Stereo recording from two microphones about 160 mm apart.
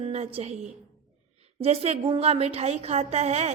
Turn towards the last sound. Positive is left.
turn(degrees=-45)  # may be behind; listen again after turning